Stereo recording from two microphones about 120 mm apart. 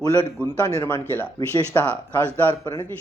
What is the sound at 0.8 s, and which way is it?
A man's voice, 15° left (ahead or behind).